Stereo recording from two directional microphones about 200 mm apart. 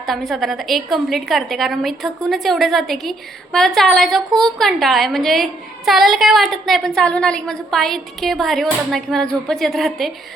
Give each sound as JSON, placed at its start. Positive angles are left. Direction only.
{"t": 0.1, "sound": "a woman's voice", "side_deg": 0}